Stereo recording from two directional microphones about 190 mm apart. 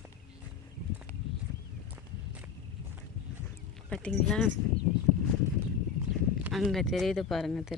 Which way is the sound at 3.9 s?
5° left (ahead or behind).